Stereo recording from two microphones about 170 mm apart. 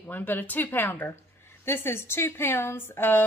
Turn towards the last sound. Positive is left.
turn(degrees=10)  # may be behind; listen again after turning